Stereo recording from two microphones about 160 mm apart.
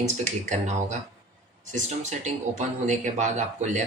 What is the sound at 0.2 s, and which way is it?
Speech, 50° right (ahead or behind).